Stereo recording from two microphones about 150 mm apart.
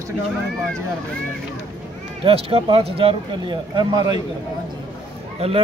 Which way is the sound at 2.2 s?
40° right (ahead or behind).